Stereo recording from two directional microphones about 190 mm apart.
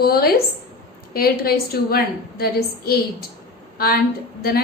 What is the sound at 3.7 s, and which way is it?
Speech, 50° left (ahead or behind).